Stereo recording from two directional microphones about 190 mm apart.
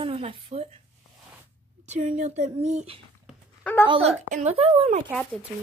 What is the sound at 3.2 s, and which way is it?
Dog, 5° left (ahead or behind).